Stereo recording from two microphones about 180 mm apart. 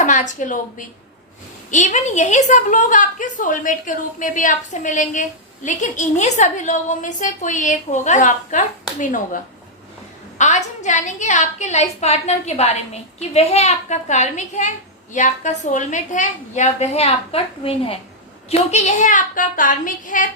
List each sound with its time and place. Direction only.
0.0 s a woman's voice: 45° left (ahead or behind)
1.7 s a woman's voice: 40° left (ahead or behind)